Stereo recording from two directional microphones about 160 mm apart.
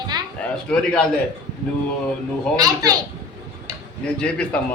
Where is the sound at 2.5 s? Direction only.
25° right (ahead or behind).